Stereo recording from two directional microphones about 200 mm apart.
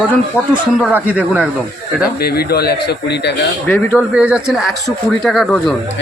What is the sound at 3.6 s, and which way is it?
Speech, 10° left (ahead or behind).